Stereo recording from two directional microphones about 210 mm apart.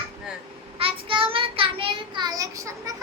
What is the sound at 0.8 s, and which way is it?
Child singing, 25° right (ahead or behind).